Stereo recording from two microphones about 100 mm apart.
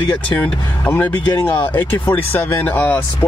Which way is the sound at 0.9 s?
20° left (ahead or behind).